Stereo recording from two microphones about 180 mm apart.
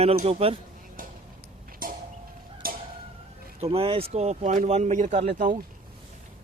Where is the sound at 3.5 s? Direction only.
35° right (ahead or behind).